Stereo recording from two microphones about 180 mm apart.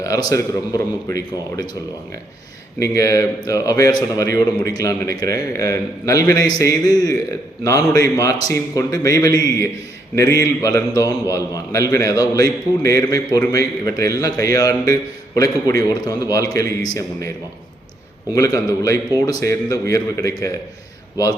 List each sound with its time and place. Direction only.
0.0 s a man's voice: 20° left (ahead or behind)
2.7 s a man's voice: 20° left (ahead or behind)
18.3 s a man's voice: 20° left (ahead or behind)